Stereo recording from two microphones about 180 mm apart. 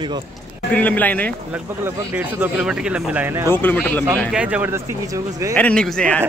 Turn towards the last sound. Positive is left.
turn(degrees=5)  # may be behind; listen again after turning